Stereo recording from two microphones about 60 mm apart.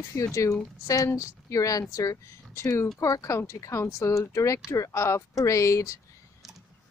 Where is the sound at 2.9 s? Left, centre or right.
Left.